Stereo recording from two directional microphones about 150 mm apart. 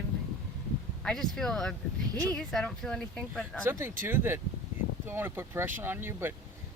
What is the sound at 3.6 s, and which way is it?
Speech, 15° right (ahead or behind).